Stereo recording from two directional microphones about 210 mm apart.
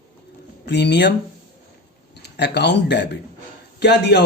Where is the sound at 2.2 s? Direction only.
55° left (ahead or behind).